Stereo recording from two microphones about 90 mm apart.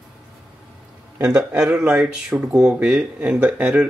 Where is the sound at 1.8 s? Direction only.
5° right (ahead or behind).